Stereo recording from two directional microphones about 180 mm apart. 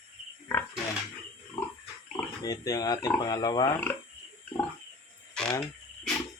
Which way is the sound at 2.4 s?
20° left (ahead or behind).